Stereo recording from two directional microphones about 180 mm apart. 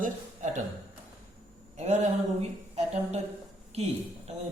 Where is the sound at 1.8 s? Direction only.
40° right (ahead or behind).